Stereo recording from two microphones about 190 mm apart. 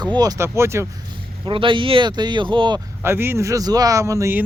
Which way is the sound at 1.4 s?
25° right (ahead or behind).